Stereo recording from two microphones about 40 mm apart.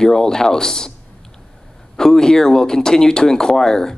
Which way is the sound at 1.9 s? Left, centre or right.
Centre.